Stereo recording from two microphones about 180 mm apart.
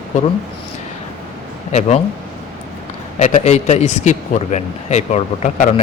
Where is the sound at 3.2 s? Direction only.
40° left (ahead or behind).